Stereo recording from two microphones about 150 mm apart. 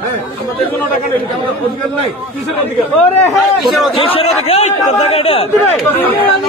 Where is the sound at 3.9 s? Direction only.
35° left (ahead or behind).